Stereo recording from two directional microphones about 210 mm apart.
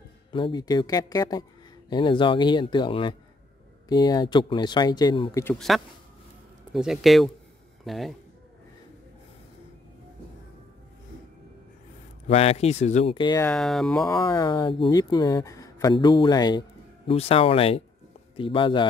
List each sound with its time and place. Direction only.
0.3 s speech: 20° left (ahead or behind)
5.4 s speech: centre (ahead or behind)
12.3 s speech: 30° left (ahead or behind)
13.4 s speech: 5° left (ahead or behind)
14.1 s a man's voice: 20° left (ahead or behind)